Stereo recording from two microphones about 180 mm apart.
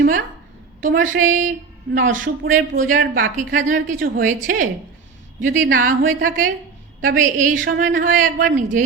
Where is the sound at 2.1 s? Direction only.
90° right.